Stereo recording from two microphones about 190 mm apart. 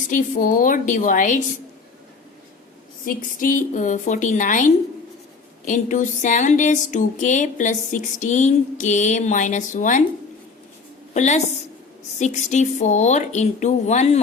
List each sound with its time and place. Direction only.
0.1 s a woman's voice: 45° left (ahead or behind)
3.1 s speech: 45° left (ahead or behind)
11.1 s a woman's voice: 35° left (ahead or behind)